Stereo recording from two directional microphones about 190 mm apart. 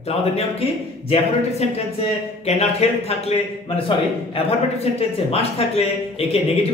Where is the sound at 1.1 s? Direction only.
35° left (ahead or behind).